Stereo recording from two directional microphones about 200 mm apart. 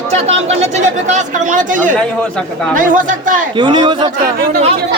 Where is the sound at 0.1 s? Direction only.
30° right (ahead or behind).